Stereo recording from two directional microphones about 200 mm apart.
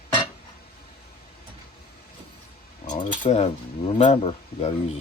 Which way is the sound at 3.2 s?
30° left (ahead or behind).